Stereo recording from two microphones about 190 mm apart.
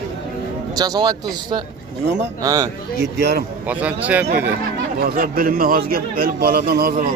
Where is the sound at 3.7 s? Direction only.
5° right (ahead or behind).